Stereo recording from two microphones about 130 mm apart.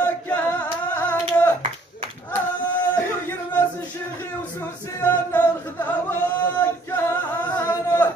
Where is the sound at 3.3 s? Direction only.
15° left (ahead or behind).